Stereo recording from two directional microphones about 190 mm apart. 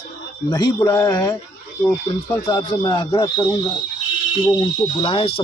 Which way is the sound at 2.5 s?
20° left (ahead or behind).